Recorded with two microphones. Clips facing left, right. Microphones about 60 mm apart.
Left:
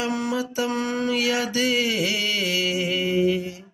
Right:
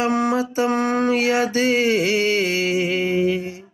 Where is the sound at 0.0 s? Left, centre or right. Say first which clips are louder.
Right 6 dB; right.